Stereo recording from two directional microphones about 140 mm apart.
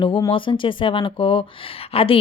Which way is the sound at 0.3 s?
35° left (ahead or behind).